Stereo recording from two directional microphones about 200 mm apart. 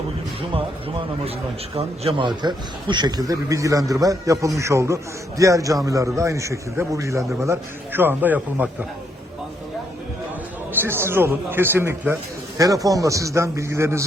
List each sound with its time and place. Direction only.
0.5 s a man's voice: 25° right (ahead or behind); by 8.7 s 10° right (ahead or behind)
10.7 s a man's voice: 10° right (ahead or behind)